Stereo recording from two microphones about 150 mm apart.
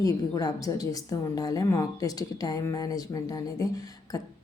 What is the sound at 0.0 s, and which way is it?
A woman's voice, 25° left (ahead or behind).